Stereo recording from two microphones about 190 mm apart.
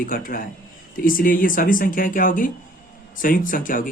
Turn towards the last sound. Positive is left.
turn(degrees=45)  # may be behind; listen again after turning